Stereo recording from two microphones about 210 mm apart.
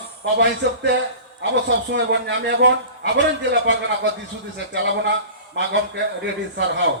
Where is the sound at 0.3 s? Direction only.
55° right (ahead or behind).